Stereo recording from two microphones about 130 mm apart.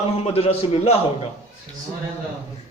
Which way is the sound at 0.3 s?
50° left (ahead or behind).